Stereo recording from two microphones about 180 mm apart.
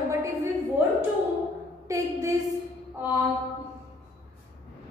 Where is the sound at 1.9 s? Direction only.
15° right (ahead or behind).